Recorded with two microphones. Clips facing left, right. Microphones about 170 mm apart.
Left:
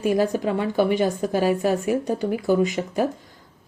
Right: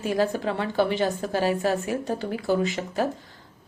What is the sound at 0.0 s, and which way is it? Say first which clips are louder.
A woman's voice: left 3 dB; 15° left (ahead or behind).